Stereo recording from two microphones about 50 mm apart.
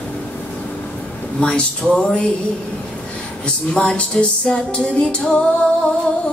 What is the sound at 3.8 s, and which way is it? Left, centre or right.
Music, centre.